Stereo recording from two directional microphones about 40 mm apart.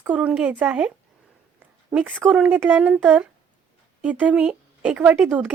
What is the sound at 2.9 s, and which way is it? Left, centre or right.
Speech, right.